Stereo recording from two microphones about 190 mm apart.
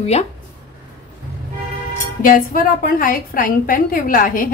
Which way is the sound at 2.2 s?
45° left (ahead or behind).